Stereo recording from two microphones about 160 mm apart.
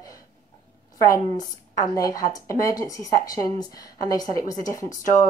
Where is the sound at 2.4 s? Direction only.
20° left (ahead or behind).